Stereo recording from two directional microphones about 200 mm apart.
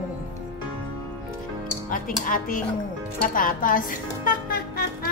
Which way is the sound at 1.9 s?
45° left (ahead or behind).